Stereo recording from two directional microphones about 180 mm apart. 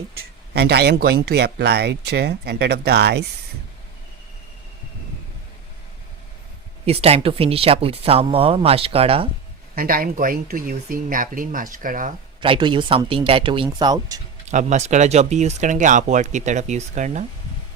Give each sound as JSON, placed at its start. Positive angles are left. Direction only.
{"t": 0.2, "sound": "speech", "side_deg": -65}
{"t": 6.8, "sound": "speech", "side_deg": -35}
{"t": 9.7, "sound": "speech", "side_deg": -55}
{"t": 12.4, "sound": "speech", "side_deg": -25}
{"t": 14.4, "sound": "speech", "side_deg": -40}